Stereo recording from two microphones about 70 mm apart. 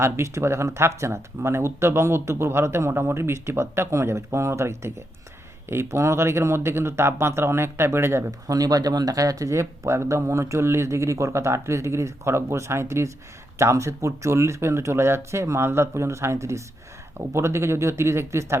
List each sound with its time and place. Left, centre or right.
0.0 s speech: right
8.3 s speech: right